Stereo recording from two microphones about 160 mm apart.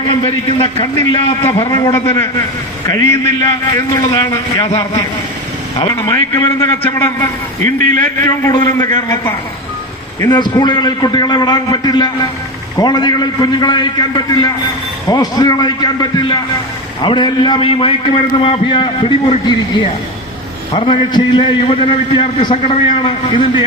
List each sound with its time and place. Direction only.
0.1 s a man's voice: 35° left (ahead or behind); by 7.1 s 15° left (ahead or behind)
7.6 s a man's voice: 50° right (ahead or behind)
8.0 s a man's voice: 20° left (ahead or behind)
10.2 s a man's voice: 25° left (ahead or behind)